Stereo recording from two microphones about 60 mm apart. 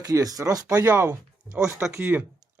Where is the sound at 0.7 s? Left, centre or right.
Right.